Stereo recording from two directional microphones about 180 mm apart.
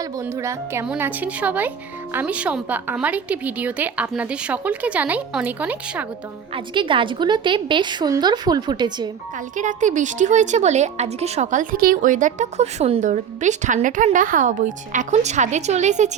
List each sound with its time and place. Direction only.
0.0 s a woman's voice: 15° right (ahead or behind)
6.5 s a woman's voice: 30° right (ahead or behind)
9.6 s speech: 45° right (ahead or behind)